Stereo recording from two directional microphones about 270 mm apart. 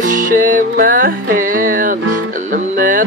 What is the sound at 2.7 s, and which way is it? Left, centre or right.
Music, right.